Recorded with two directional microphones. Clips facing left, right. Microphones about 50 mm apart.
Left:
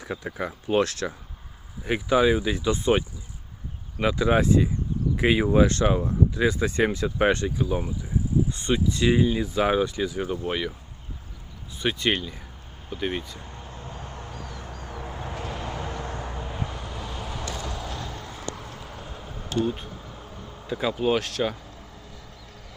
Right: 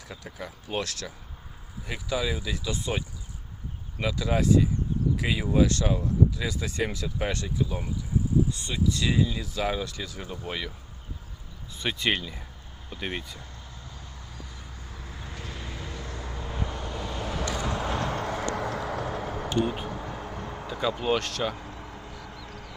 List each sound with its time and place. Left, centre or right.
0.0 s speech: left
4.0 s speech: left; by 10.8 s centre
11.8 s speech: centre
13.4 s vehicle: left
16.5 s vehicle: centre
17.7 s vehicle: right
18.1 s vehicle: right
19.0 s a sound: right
19.9 s vehicle: right
20.7 s speech: centre
21.7 s a sound: right